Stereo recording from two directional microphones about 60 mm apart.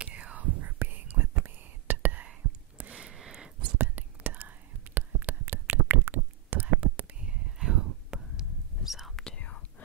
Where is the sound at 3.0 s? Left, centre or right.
Centre.